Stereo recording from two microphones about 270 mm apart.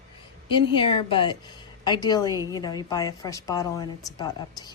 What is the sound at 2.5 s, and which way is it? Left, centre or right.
A woman's voice, centre.